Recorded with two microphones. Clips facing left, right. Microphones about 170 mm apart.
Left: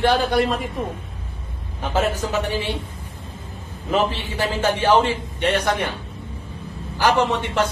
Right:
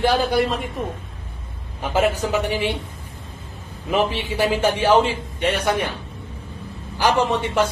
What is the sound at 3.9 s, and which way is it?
A man's voice, 15° right (ahead or behind).